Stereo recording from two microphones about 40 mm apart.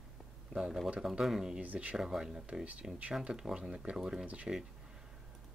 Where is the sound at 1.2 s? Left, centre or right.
Centre.